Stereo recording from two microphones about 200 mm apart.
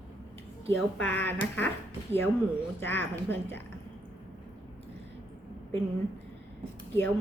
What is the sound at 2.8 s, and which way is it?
Speech, 10° left (ahead or behind).